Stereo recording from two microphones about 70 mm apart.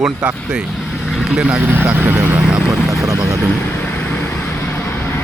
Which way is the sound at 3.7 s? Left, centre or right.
Left.